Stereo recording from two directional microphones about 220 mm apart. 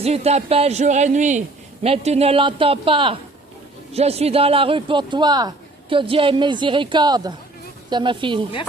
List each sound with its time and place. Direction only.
0.0 s a man's voice: 30° right (ahead or behind)